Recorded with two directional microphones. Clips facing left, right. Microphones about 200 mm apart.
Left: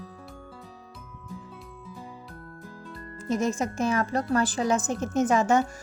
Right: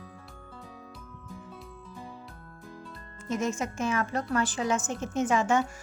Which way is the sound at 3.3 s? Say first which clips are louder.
Left 4 dB; 35° left (ahead or behind).